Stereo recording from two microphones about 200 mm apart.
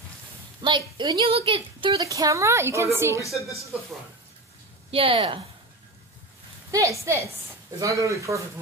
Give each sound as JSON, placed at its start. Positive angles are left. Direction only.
{"t": 0.6, "sound": "a woman's voice", "side_deg": -25}
{"t": 4.9, "sound": "speech", "side_deg": -25}
{"t": 6.7, "sound": "a woman's voice", "side_deg": -15}